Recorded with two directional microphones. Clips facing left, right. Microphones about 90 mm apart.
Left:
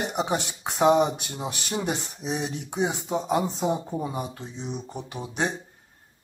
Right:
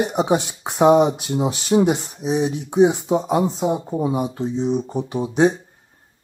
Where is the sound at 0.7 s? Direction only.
5° right (ahead or behind).